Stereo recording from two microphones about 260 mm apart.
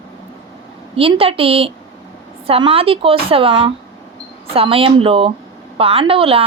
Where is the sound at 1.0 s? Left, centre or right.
Right.